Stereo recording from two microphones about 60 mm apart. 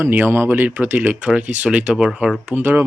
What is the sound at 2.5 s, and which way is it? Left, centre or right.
Speech, right.